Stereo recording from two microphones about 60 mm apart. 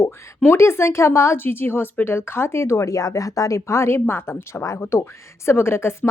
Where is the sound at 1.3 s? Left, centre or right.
Left.